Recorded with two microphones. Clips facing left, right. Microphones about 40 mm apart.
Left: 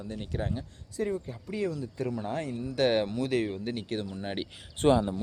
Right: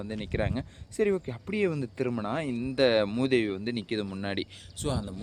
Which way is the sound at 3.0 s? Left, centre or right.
Right.